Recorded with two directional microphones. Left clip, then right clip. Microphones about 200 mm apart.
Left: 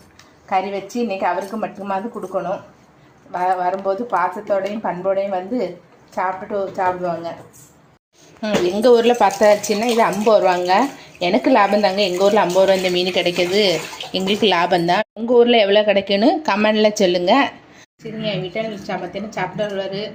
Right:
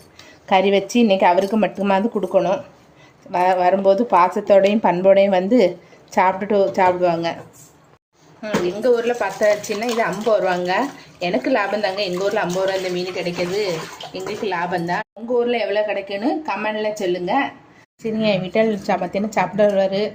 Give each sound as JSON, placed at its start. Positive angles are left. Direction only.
{"t": 0.5, "sound": "a woman's voice", "side_deg": -45}
{"t": 8.4, "sound": "speech", "side_deg": 25}
{"t": 9.4, "sound": "speech", "side_deg": 15}
{"t": 14.1, "sound": "a woman's voice", "side_deg": 35}
{"t": 18.2, "sound": "a woman's voice", "side_deg": -55}